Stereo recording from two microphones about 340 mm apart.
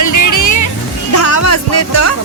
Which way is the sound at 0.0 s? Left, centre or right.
Left.